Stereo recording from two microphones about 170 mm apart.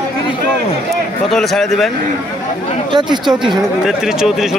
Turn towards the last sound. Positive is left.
turn(degrees=0)  # may be behind; listen again after turning